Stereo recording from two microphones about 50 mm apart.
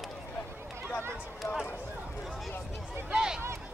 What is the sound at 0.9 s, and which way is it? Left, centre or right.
Run, left.